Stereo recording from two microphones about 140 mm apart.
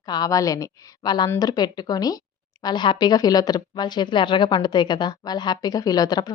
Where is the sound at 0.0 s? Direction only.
30° left (ahead or behind).